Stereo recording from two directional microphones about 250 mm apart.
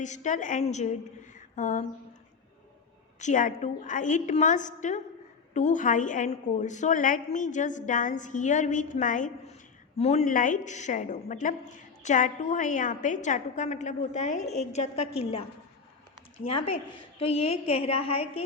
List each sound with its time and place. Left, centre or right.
0.0 s a woman's voice: left
3.2 s a woman's voice: left
16.5 s a woman's voice: left